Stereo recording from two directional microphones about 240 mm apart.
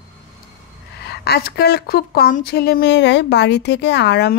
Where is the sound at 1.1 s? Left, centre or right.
Left.